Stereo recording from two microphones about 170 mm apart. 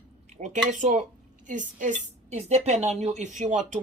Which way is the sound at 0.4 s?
45° right (ahead or behind).